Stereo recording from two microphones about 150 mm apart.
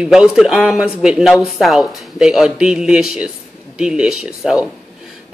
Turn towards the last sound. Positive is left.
turn(degrees=-5)  # may be behind; listen again after turning